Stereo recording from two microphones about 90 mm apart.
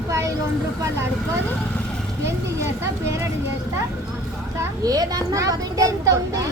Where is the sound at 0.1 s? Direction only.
35° right (ahead or behind).